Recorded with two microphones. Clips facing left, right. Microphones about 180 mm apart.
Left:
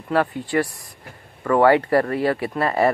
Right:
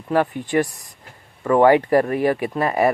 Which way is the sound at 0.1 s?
20° right (ahead or behind).